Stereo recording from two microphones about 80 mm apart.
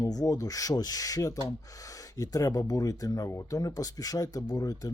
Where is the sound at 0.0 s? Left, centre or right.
Left.